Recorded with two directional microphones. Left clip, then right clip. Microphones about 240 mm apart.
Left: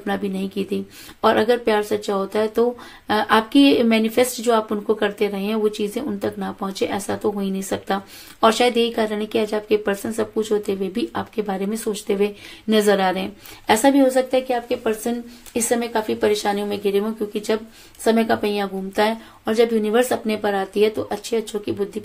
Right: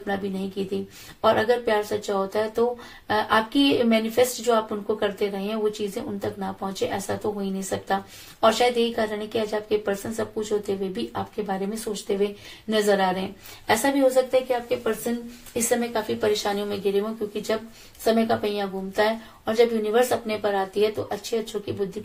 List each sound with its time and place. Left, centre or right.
0.0 s a woman's voice: left